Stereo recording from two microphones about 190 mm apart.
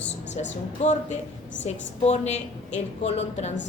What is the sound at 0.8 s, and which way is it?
A woman's voice, 35° left (ahead or behind).